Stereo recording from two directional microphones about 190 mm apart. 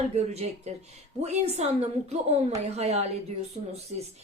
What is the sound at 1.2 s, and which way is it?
A woman's voice, 35° right (ahead or behind).